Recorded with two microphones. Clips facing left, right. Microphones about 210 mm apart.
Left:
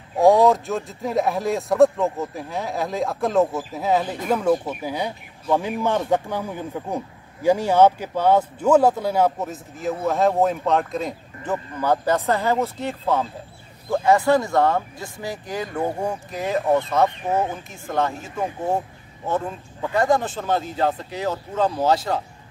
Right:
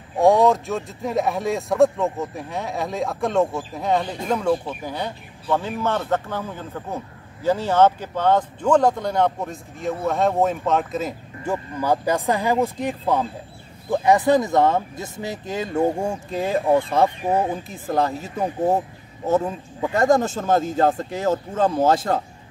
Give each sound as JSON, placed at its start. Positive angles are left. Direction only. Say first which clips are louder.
{"t": 0.2, "sound": "speech", "louder": "left 1 dB", "side_deg": 0}
{"t": 19.9, "sound": "speech", "louder": "right 2 dB", "side_deg": -45}